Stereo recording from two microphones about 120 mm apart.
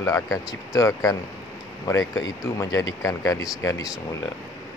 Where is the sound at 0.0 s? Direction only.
30° left (ahead or behind).